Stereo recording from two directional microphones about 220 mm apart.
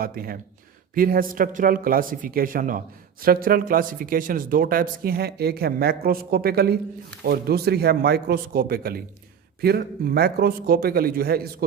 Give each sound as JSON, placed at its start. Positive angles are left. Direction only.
{"t": 0.0, "sound": "a man's voice", "side_deg": -40}